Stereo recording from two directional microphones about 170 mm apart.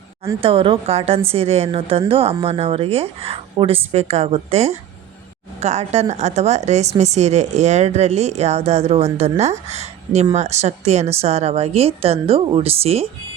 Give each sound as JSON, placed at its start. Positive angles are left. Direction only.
{"t": 0.3, "sound": "a woman's voice", "side_deg": -30}